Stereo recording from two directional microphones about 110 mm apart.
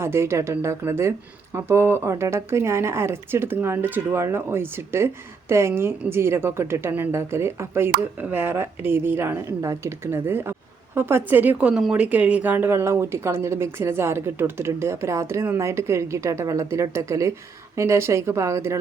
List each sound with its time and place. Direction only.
0.0 s speech: 25° right (ahead or behind)